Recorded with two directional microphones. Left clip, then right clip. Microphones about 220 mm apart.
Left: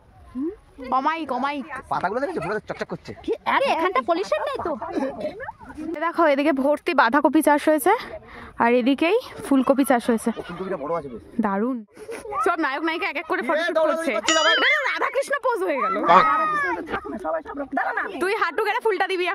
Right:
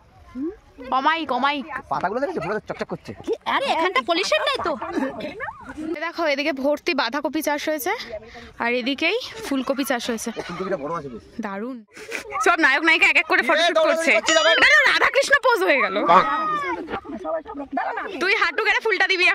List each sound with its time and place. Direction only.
0.8 s speech: 5° left (ahead or behind)
1.6 s speech: 40° right (ahead or behind)
3.3 s speech: 40° left (ahead or behind)
4.0 s speech: 35° left (ahead or behind)
5.9 s speech: 30° left (ahead or behind)
10.3 s speech: 30° right (ahead or behind)
11.4 s speech: 30° left (ahead or behind)
12.1 s a woman's voice: 10° left (ahead or behind)
13.6 s speech: 50° left (ahead or behind)
14.2 s speech: centre (ahead or behind)
18.2 s speech: 20° left (ahead or behind)